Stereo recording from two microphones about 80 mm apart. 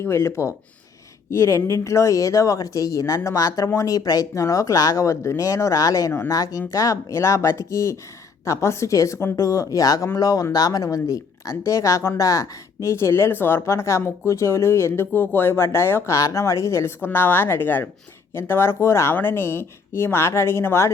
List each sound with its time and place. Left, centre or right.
0.0 s a woman's voice: left